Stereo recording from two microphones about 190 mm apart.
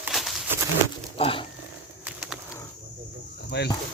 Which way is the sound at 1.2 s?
30° left (ahead or behind).